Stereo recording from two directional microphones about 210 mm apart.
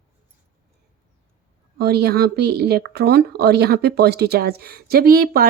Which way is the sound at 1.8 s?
50° right (ahead or behind).